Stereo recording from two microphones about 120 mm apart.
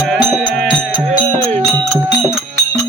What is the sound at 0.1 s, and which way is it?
Music, centre (ahead or behind).